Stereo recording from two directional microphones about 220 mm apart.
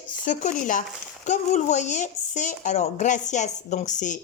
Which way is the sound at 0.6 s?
35° left (ahead or behind).